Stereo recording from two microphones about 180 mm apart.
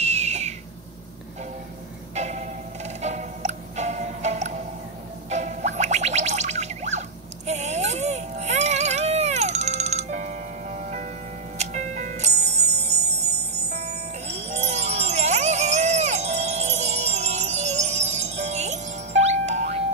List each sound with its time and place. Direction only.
0.0 s owl: 40° right (ahead or behind)
2.1 s music: 40° right (ahead or behind)